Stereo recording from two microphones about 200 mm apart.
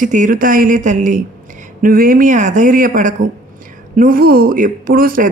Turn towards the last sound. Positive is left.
turn(degrees=-45)  # may be behind; listen again after turning